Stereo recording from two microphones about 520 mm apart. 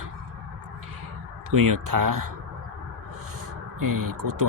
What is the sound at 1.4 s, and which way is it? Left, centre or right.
Speech, right.